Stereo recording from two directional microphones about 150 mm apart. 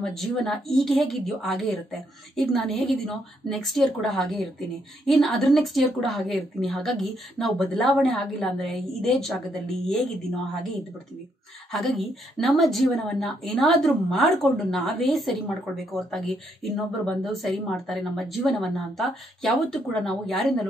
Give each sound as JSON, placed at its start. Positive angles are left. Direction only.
{"t": 0.0, "sound": "a woman's voice", "side_deg": 5}
{"t": 11.7, "sound": "a woman's voice", "side_deg": 0}